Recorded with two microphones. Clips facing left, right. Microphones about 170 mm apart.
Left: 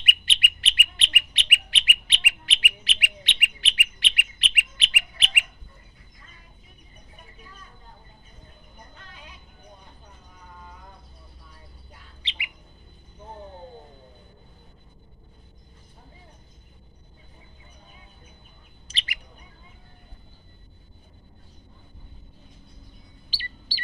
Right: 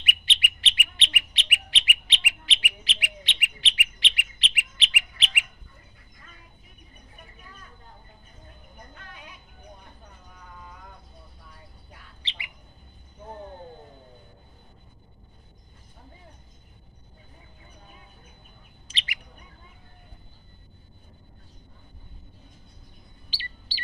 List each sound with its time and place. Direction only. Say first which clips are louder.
0.0 s bird: left 1 dB; 55° left (ahead or behind)
12.2 s bird: left 3 dB; 15° left (ahead or behind)
18.9 s bird: even; 40° left (ahead or behind)